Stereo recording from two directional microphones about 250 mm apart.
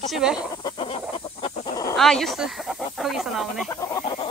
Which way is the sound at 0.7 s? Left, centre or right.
Left.